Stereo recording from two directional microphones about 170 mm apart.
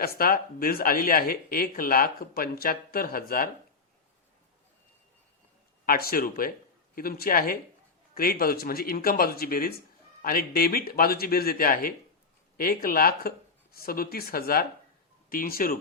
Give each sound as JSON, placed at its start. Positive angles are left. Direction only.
{"t": 0.0, "sound": "speech", "side_deg": 60}
{"t": 5.8, "sound": "speech", "side_deg": 60}